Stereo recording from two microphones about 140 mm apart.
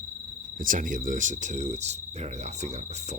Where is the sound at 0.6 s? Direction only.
75° right (ahead or behind); by 2.0 s 55° right (ahead or behind).